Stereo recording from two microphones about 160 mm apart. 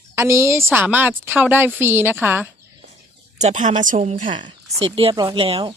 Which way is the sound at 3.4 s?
50° right (ahead or behind).